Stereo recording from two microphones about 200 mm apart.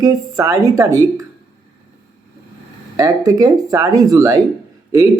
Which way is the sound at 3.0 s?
15° right (ahead or behind).